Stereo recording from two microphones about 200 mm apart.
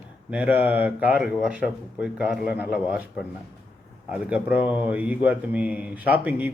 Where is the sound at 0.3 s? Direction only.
10° right (ahead or behind).